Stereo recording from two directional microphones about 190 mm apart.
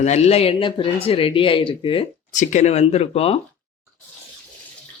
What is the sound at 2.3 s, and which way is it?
Speech, 40° left (ahead or behind).